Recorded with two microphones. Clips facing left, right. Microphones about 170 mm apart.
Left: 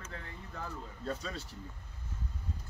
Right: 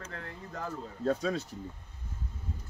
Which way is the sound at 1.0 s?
55° right (ahead or behind).